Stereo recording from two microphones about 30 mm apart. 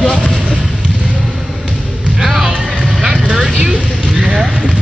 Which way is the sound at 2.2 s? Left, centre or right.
Centre.